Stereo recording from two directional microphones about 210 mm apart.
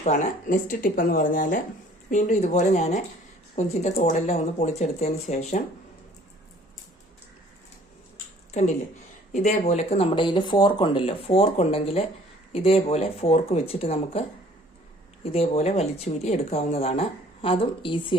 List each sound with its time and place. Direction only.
0.0 s speech: 35° left (ahead or behind)
8.6 s speech: 35° left (ahead or behind)